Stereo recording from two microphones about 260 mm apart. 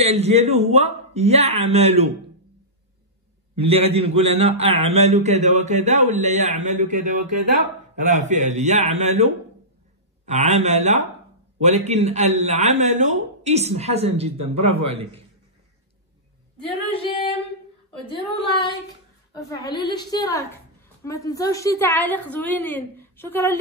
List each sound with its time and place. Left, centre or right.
0.0 s a man's voice: right
3.5 s a man's voice: right
16.9 s female singing: left
18.0 s a woman's voice: centre
19.8 s a woman's voice: centre